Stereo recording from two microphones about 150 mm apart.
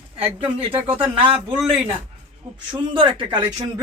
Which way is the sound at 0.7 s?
10° right (ahead or behind).